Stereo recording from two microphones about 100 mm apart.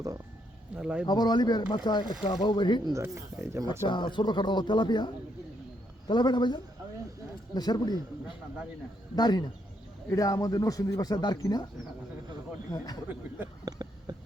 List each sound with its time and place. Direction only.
0.8 s speech: 10° right (ahead or behind)
1.0 s speech: 45° left (ahead or behind)
2.9 s speech: 25° right (ahead or behind)
3.8 s speech: 50° left (ahead or behind)
9.1 s speech: 45° left (ahead or behind)
12.7 s speech: 40° left (ahead or behind)
13.7 s a sound: 40° right (ahead or behind)